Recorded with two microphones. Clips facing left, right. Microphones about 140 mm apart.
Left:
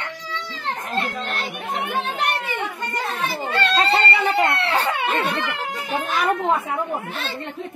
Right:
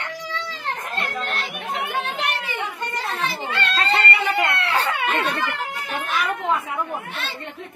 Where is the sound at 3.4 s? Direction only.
45° left (ahead or behind).